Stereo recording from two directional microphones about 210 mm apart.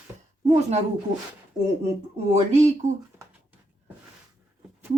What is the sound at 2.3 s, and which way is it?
Speech, 35° right (ahead or behind).